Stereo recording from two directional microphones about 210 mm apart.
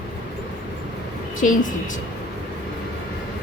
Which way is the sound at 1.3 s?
40° left (ahead or behind).